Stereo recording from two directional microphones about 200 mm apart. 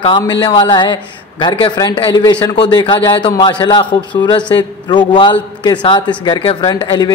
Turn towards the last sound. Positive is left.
turn(degrees=20)  # may be behind; listen again after turning